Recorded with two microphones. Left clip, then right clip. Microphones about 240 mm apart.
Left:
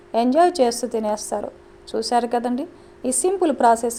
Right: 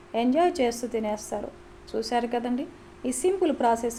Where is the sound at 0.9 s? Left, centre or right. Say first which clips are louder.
Left 6 dB; left.